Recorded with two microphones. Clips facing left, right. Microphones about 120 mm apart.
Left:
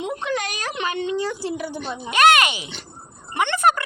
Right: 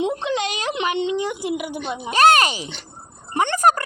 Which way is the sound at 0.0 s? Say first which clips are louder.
Right 3 dB; 20° right (ahead or behind).